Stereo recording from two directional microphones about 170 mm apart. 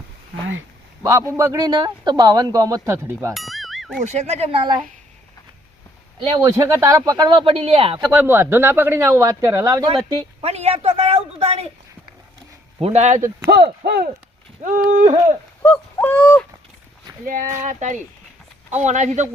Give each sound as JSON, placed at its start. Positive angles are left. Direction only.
{"t": 1.0, "sound": "a man's voice", "side_deg": -20}
{"t": 3.3, "sound": "music", "side_deg": 0}
{"t": 4.0, "sound": "speech", "side_deg": -40}
{"t": 6.1, "sound": "a man's voice", "side_deg": -25}
{"t": 8.1, "sound": "speech", "side_deg": -15}
{"t": 9.9, "sound": "speech", "side_deg": -35}
{"t": 12.8, "sound": "speech", "side_deg": -40}
{"t": 13.5, "sound": "speech", "side_deg": -75}
{"t": 14.6, "sound": "speech", "side_deg": -50}
{"t": 15.6, "sound": "owl", "side_deg": 10}
{"t": 17.7, "sound": "speech", "side_deg": -45}